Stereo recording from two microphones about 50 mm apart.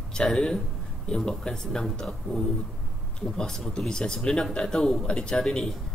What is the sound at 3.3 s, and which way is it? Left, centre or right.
Speech, centre.